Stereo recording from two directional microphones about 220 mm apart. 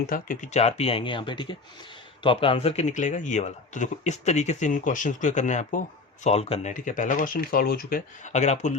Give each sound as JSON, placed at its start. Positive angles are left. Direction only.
{"t": 0.1, "sound": "speech", "side_deg": 35}